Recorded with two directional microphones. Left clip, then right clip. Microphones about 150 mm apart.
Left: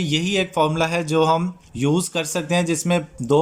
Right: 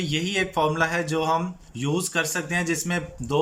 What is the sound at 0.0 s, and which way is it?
Speech, 25° left (ahead or behind).